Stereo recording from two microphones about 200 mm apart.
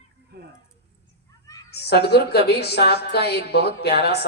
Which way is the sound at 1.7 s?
55° left (ahead or behind).